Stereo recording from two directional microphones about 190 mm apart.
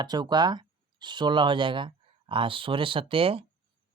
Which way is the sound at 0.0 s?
20° right (ahead or behind).